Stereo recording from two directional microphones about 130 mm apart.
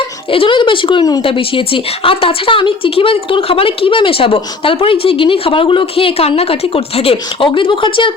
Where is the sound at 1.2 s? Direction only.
45° left (ahead or behind).